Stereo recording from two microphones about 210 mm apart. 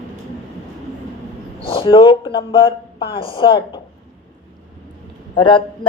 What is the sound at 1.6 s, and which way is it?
Speech, 25° left (ahead or behind).